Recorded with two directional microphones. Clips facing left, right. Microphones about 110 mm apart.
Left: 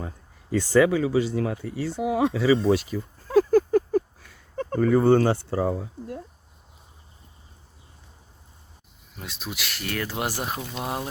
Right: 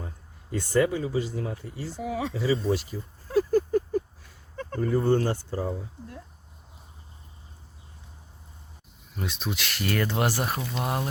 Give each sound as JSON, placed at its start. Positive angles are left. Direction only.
{"t": 0.5, "sound": "speech", "side_deg": 90}
{"t": 9.1, "sound": "speech", "side_deg": 5}
{"t": 10.6, "sound": "speech", "side_deg": 5}